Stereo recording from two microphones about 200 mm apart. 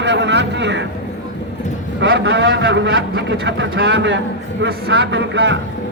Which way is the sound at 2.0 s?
60° right (ahead or behind).